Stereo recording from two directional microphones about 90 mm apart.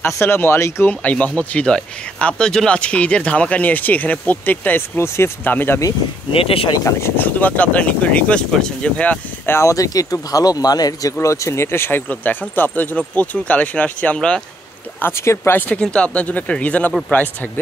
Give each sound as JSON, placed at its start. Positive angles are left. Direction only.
{"t": 0.0, "sound": "speech", "side_deg": 25}
{"t": 0.8, "sound": "speech", "side_deg": 15}
{"t": 6.3, "sound": "speech", "side_deg": 90}
{"t": 6.8, "sound": "speech", "side_deg": 35}
{"t": 7.2, "sound": "speech", "side_deg": 20}
{"t": 9.5, "sound": "speech", "side_deg": 35}
{"t": 11.1, "sound": "speech", "side_deg": 30}
{"t": 15.0, "sound": "speech", "side_deg": 25}
{"t": 15.7, "sound": "speech", "side_deg": 10}